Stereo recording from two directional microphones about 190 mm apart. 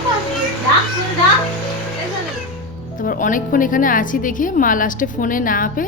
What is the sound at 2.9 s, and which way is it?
A woman's voice, 45° left (ahead or behind).